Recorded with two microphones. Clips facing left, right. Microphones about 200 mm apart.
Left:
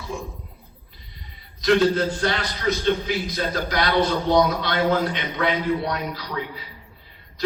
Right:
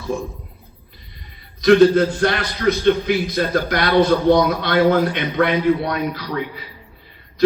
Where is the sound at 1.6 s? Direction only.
55° right (ahead or behind).